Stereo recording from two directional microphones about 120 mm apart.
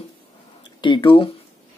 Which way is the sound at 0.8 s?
45° left (ahead or behind).